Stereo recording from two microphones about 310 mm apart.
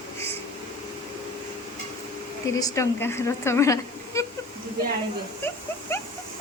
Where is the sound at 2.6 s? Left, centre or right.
Centre.